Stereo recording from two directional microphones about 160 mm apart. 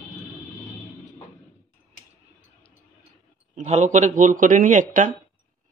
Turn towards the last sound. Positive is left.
turn(degrees=-55)  # may be behind; listen again after turning